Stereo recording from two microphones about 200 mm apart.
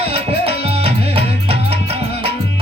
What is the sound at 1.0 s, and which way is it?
Music, 30° right (ahead or behind).